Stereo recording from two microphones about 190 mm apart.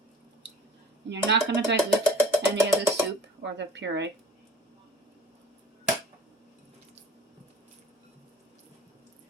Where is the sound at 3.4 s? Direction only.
65° right (ahead or behind).